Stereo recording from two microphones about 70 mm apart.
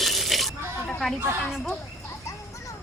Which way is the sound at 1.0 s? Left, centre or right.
Centre.